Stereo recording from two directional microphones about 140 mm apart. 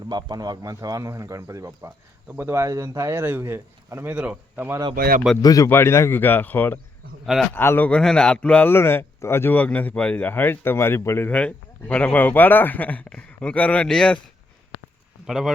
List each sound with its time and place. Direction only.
0.1 s a man's voice: 30° right (ahead or behind); by 4.8 s 10° right (ahead or behind)
4.9 s speech: 90° right
5.4 s speech: 25° left (ahead or behind)
5.6 s a man's voice: 15° left (ahead or behind)
7.3 s speech: centre (ahead or behind)
7.5 s a man's voice: 15° left (ahead or behind)
15.3 s speech: 5° right (ahead or behind)